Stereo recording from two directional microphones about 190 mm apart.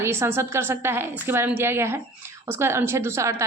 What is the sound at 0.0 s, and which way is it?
Speech, 15° right (ahead or behind).